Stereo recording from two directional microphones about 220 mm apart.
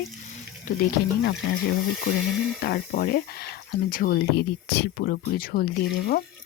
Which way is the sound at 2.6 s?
45° left (ahead or behind).